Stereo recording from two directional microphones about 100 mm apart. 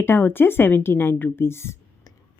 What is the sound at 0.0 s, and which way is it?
A woman's voice, 20° left (ahead or behind).